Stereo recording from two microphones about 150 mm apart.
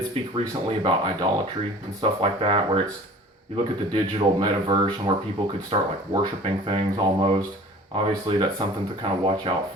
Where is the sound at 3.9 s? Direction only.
35° right (ahead or behind).